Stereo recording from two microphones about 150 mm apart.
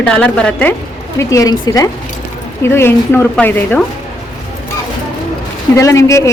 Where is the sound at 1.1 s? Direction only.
20° left (ahead or behind).